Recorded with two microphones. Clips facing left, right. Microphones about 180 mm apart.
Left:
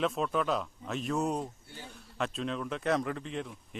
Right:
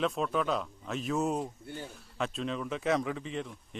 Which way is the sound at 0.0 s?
Centre (ahead or behind).